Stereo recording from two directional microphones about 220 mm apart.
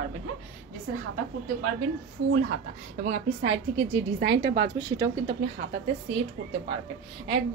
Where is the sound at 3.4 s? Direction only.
60° right (ahead or behind).